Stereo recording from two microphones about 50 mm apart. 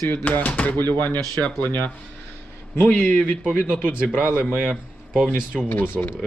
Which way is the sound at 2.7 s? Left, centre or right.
Left.